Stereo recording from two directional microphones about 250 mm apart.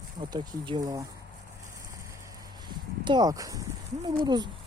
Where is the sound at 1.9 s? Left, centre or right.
Centre.